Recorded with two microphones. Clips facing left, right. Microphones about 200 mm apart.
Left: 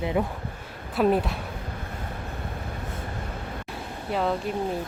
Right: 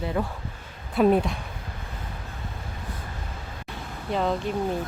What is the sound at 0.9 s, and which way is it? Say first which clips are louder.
Speech: right 2 dB; 5° left (ahead or behind).